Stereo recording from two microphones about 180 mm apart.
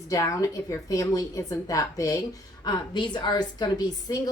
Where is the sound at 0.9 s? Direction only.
20° left (ahead or behind).